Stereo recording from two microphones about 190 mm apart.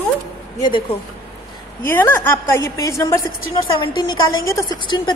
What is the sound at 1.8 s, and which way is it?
A woman's voice, 10° left (ahead or behind).